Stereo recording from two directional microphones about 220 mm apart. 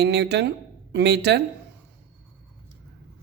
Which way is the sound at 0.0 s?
50° right (ahead or behind).